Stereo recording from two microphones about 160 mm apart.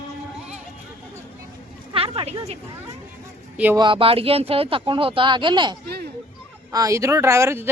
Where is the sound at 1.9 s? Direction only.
35° right (ahead or behind).